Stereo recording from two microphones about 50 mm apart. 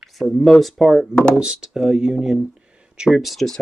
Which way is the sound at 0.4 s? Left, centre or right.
Centre.